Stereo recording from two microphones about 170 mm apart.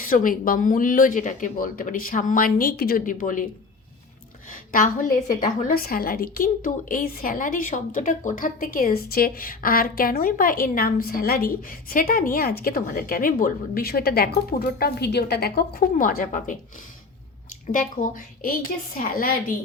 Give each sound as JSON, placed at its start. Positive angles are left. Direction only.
{"t": 0.0, "sound": "speech", "side_deg": 55}
{"t": 4.4, "sound": "a woman's voice", "side_deg": 50}
{"t": 17.7, "sound": "a woman's voice", "side_deg": 50}